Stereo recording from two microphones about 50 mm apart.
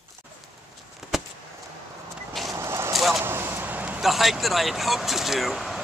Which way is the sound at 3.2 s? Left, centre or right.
Right.